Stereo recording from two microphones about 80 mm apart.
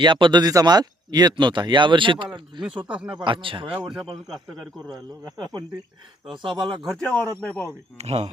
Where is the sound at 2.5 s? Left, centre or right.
Right.